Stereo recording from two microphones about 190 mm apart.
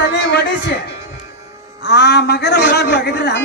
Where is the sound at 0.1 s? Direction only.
65° left (ahead or behind).